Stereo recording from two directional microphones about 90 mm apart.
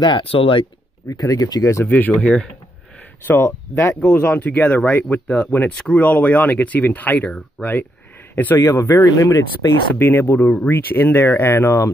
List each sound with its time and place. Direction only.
0.0 s speech: 75° left (ahead or behind)
1.0 s speech: 40° left (ahead or behind)
1.9 s speech: 20° left (ahead or behind)
3.3 s speech: 25° left (ahead or behind)
3.9 s speech: 15° left (ahead or behind)
8.5 s speech: 30° left (ahead or behind)
9.9 s speech: 30° left (ahead or behind)